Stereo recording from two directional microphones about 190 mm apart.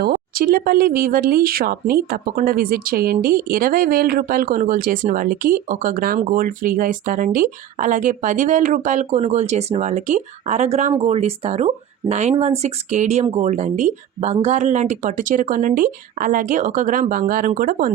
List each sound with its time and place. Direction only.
0.0 s speech: 50° right (ahead or behind)